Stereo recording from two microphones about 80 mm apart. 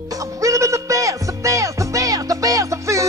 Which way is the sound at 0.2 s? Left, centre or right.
Right.